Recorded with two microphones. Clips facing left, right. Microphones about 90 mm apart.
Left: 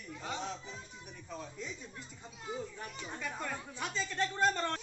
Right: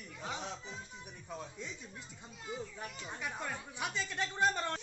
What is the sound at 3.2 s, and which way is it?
Speech, 10° right (ahead or behind).